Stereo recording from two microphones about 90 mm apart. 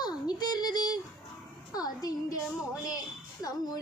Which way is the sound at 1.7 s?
45° left (ahead or behind).